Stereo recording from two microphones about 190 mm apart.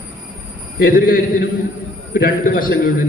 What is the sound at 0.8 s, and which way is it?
A man's voice, 50° left (ahead or behind).